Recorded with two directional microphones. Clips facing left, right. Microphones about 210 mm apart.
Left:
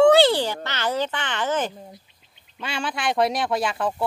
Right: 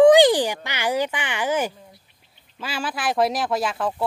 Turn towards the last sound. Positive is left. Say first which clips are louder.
# even
turn(degrees=0)  # may be behind; listen again after turning